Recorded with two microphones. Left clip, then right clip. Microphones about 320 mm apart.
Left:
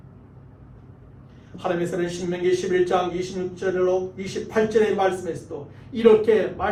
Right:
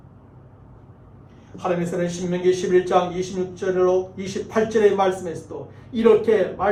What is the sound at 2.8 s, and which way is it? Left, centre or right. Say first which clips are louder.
A man's voice: right 2 dB; centre.